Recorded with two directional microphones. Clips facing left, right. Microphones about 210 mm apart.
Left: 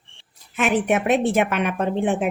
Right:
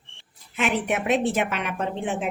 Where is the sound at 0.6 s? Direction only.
50° left (ahead or behind).